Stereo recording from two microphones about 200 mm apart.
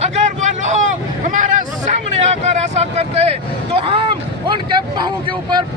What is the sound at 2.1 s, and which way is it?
A man's voice, 35° right (ahead or behind).